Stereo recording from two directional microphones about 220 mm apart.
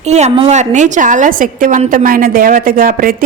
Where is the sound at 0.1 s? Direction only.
30° right (ahead or behind).